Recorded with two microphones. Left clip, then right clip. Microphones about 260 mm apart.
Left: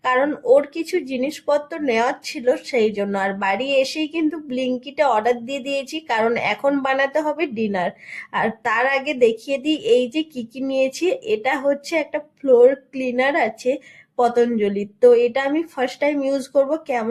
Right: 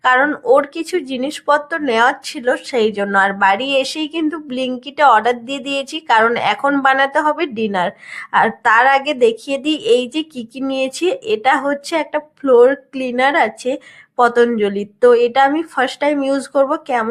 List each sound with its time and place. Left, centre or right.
0.0 s a woman's voice: centre